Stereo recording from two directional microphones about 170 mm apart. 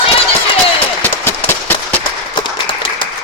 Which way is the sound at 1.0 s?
10° left (ahead or behind).